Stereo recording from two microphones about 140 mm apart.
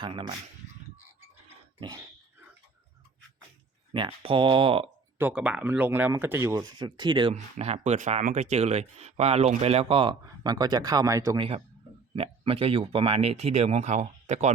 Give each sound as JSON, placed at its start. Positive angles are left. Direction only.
{"t": 0.0, "sound": "speech", "side_deg": -40}
{"t": 3.9, "sound": "speech", "side_deg": -40}
{"t": 5.1, "sound": "speech", "side_deg": -10}
{"t": 7.5, "sound": "speech", "side_deg": -50}
{"t": 10.2, "sound": "speech", "side_deg": -30}
{"t": 11.3, "sound": "speech", "side_deg": -40}